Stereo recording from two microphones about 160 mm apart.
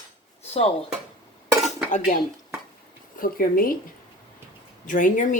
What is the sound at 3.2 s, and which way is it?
Speech, 65° left (ahead or behind).